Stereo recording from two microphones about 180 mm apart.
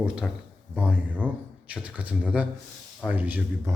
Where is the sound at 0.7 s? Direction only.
10° right (ahead or behind).